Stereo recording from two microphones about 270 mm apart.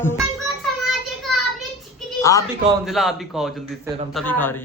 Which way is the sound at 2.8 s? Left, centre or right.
Centre.